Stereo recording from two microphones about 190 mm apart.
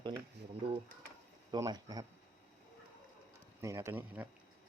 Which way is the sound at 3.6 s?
15° right (ahead or behind).